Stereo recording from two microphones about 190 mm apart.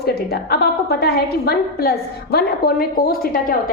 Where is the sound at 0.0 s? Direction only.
55° left (ahead or behind).